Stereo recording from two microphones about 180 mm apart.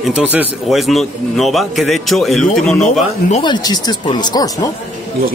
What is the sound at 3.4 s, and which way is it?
Speech, 25° left (ahead or behind).